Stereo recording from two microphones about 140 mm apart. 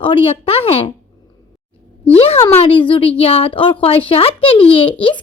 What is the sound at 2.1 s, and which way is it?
A woman's voice, 45° left (ahead or behind).